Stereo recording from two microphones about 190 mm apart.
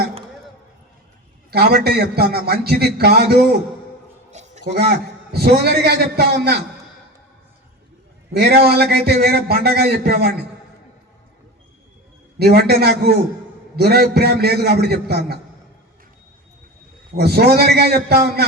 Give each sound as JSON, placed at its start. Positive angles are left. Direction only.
{"t": 1.5, "sound": "a man's voice", "side_deg": -55}
{"t": 4.3, "sound": "a sound", "side_deg": -35}
{"t": 4.7, "sound": "a man's voice", "side_deg": -55}
{"t": 8.5, "sound": "a man's voice", "side_deg": -55}
{"t": 12.4, "sound": "a man's voice", "side_deg": -55}
{"t": 17.2, "sound": "a man's voice", "side_deg": -55}